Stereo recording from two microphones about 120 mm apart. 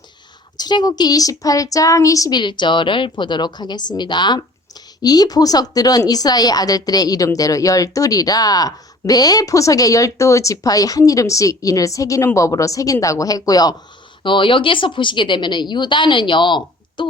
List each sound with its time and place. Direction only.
0.6 s a woman's voice: 35° left (ahead or behind)
14.3 s a woman's voice: 45° left (ahead or behind)